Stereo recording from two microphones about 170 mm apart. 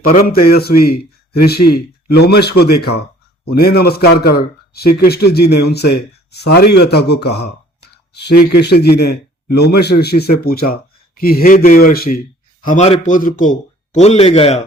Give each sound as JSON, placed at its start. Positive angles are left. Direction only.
{"t": 0.1, "sound": "a man's voice", "side_deg": 60}
{"t": 12.6, "sound": "a man's voice", "side_deg": 40}